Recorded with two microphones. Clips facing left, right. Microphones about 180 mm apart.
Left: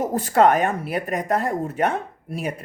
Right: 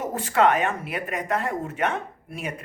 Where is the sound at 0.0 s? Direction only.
40° left (ahead or behind).